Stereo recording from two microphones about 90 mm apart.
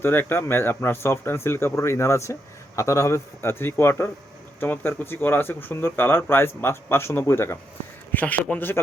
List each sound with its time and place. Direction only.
0.0 s speech: 25° left (ahead or behind)
8.1 s speech: 20° left (ahead or behind)